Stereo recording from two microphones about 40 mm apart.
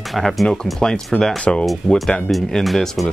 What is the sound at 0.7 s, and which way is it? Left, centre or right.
Speech, centre.